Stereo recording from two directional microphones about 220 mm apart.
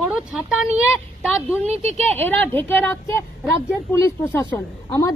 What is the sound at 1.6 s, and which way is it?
Speech, 30° right (ahead or behind).